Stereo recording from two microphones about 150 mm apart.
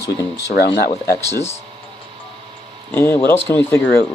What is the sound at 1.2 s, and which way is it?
Speech, 20° left (ahead or behind).